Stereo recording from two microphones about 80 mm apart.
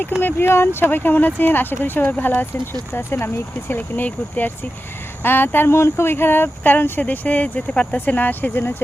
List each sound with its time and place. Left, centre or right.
0.2 s speech: left